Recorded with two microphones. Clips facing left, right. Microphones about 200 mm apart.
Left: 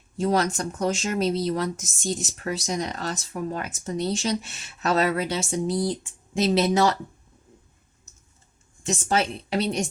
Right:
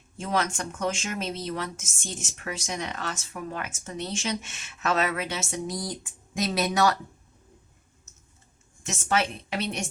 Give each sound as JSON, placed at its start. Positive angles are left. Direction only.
{"t": 0.2, "sound": "speech", "side_deg": 35}
{"t": 8.8, "sound": "speech", "side_deg": 30}